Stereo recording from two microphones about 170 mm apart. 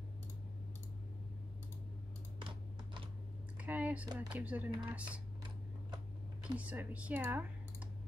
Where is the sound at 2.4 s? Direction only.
30° right (ahead or behind).